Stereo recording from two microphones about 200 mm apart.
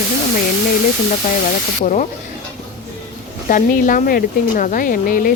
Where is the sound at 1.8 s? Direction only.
40° left (ahead or behind).